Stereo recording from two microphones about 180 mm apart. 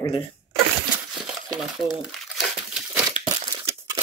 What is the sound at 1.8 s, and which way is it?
Speech, centre (ahead or behind).